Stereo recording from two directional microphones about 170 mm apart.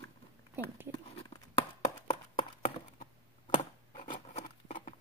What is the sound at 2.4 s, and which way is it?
Horse, 30° left (ahead or behind).